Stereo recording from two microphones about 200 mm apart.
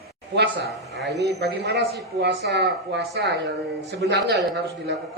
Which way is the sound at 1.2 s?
55° right (ahead or behind).